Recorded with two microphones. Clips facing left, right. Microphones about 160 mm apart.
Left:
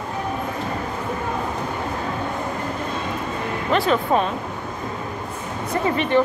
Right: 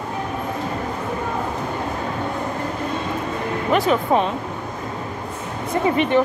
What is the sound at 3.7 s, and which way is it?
Speech, 20° right (ahead or behind).